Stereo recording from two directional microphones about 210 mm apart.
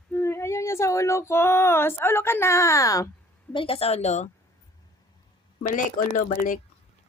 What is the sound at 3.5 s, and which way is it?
Speech, 25° left (ahead or behind).